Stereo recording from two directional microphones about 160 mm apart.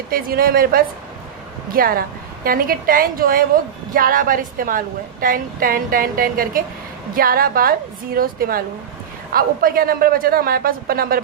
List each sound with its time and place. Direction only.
0.1 s a man's voice: 65° right (ahead or behind)